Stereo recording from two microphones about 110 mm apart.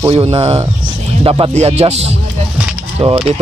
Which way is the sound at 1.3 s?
45° right (ahead or behind).